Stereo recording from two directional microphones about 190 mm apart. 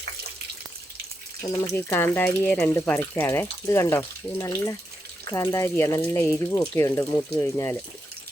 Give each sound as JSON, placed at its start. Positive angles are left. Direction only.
{"t": 1.4, "sound": "speech", "side_deg": 10}